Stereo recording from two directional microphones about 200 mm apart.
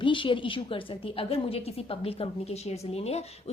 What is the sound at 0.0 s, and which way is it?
A woman's voice, 25° left (ahead or behind).